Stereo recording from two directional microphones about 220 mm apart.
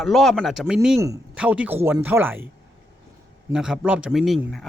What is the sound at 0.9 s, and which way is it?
Speech, 15° right (ahead or behind).